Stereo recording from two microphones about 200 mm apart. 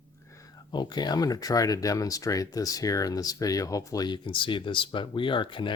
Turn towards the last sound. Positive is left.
turn(degrees=25)  # may be behind; listen again after turning